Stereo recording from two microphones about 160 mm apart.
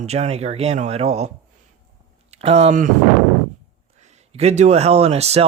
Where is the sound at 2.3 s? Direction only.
40° right (ahead or behind).